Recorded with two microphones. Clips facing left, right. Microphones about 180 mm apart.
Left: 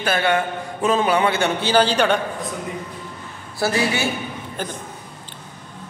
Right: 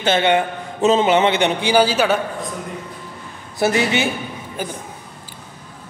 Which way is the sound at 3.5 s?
20° right (ahead or behind).